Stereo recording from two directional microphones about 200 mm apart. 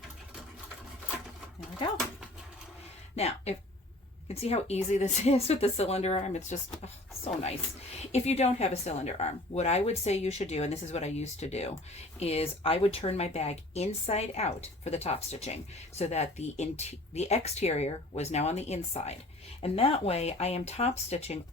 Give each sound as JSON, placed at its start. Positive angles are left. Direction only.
{"t": 1.8, "sound": "speech", "side_deg": 25}
{"t": 3.2, "sound": "a woman's voice", "side_deg": 30}
{"t": 8.1, "sound": "a woman's voice", "side_deg": 35}